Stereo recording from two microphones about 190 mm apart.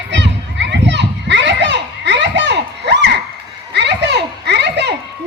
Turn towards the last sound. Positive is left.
turn(degrees=-65)  # may be behind; listen again after turning